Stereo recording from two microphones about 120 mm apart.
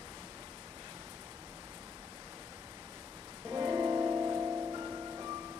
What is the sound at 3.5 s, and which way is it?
Music, 30° right (ahead or behind).